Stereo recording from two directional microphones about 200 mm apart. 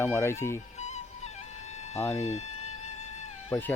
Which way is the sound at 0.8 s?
35° left (ahead or behind).